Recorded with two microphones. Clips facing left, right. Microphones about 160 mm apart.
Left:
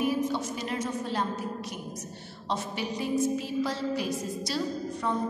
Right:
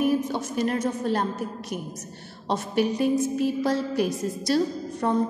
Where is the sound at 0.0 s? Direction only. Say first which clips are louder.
Right 4 dB; 50° right (ahead or behind).